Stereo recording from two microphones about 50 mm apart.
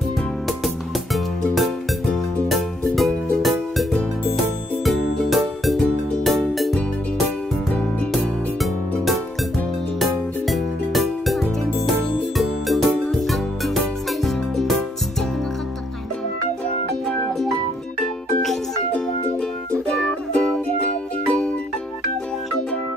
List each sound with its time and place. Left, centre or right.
0.5 s music: centre
4.8 s music: centre
7.7 s music: left
8.6 s music: centre
18.0 s music: centre
19.9 s music: centre
20.6 s music: left